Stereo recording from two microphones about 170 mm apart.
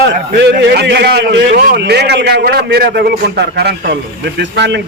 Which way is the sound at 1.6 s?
70° right (ahead or behind).